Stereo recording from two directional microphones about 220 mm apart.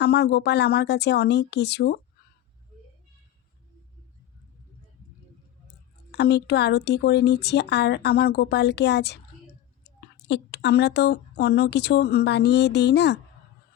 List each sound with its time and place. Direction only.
0.0 s speech: 50° left (ahead or behind)
6.1 s speech: 50° left (ahead or behind)
10.2 s speech: 50° left (ahead or behind)